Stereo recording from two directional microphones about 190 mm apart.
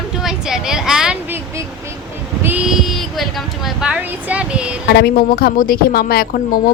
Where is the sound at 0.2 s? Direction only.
Centre (ahead or behind).